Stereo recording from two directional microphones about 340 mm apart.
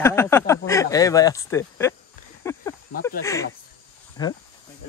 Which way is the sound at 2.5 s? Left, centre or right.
Centre.